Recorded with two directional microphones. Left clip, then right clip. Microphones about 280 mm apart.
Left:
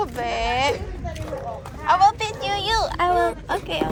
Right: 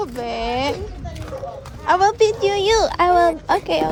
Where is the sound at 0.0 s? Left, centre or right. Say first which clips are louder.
Even; centre.